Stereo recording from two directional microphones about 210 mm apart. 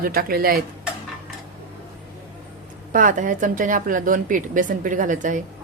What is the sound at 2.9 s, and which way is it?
Speech, 40° right (ahead or behind).